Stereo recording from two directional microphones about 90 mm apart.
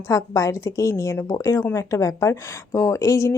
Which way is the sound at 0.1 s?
40° left (ahead or behind).